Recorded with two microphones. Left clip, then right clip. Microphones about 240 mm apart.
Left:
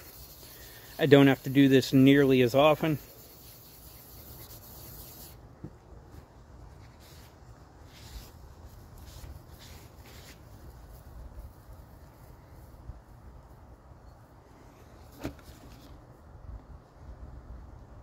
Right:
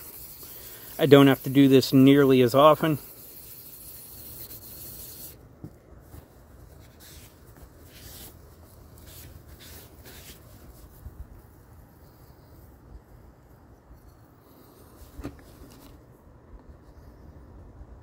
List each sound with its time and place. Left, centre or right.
0.8 s speech: right